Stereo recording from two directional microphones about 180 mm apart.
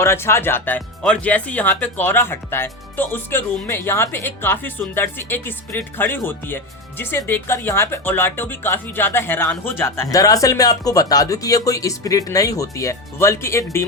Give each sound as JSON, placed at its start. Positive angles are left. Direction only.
{"t": 0.0, "sound": "speech", "side_deg": 15}